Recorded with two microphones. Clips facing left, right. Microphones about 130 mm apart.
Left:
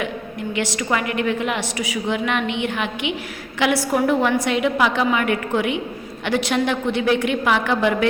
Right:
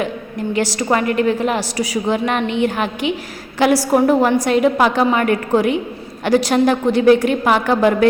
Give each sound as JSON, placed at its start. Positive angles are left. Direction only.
{"t": 0.5, "sound": "a woman's voice", "side_deg": -35}